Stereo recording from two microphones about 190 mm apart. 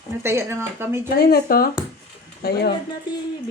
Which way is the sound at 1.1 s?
55° left (ahead or behind).